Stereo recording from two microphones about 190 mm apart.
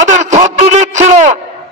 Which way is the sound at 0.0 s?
40° right (ahead or behind).